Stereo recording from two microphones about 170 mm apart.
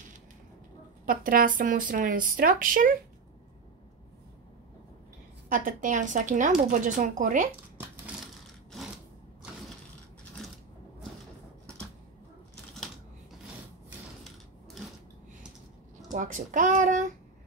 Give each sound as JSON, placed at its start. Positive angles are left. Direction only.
{"t": 1.0, "sound": "speech", "side_deg": -55}
{"t": 5.5, "sound": "speech", "side_deg": -50}
{"t": 12.7, "sound": "a sound", "side_deg": 0}
{"t": 16.1, "sound": "speech", "side_deg": -50}